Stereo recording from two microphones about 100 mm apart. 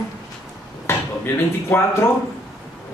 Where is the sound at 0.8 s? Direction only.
20° left (ahead or behind).